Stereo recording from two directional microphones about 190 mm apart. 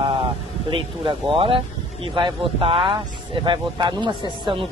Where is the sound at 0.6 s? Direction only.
25° right (ahead or behind).